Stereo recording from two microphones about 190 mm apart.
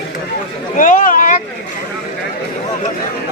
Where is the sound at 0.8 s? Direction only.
45° left (ahead or behind).